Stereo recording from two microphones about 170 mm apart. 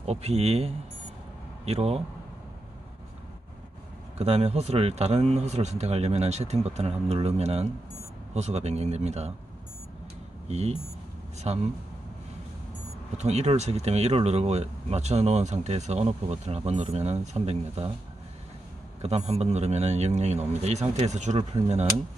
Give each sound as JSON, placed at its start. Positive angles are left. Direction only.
{"t": 0.0, "sound": "speech", "side_deg": -40}
{"t": 4.2, "sound": "speech", "side_deg": -40}
{"t": 10.5, "sound": "speech", "side_deg": -40}
{"t": 13.2, "sound": "speech", "side_deg": -40}
{"t": 18.9, "sound": "speech", "side_deg": -40}